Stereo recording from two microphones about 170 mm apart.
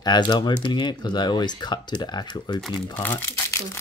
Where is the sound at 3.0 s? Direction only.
10° left (ahead or behind).